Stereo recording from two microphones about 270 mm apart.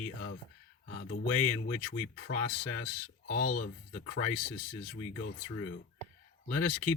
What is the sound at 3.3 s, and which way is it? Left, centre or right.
Speech, left.